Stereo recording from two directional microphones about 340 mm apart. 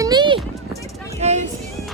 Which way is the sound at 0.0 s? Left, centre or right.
Centre.